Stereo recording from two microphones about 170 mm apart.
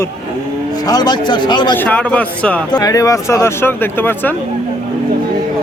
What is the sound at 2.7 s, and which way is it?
Speech, 20° left (ahead or behind).